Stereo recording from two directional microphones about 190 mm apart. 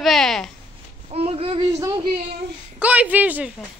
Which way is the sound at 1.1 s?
30° right (ahead or behind).